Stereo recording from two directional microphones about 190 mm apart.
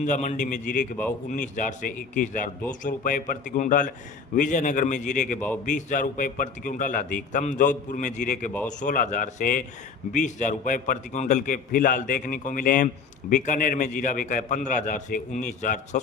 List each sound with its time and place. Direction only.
0.0 s a man's voice: 40° left (ahead or behind)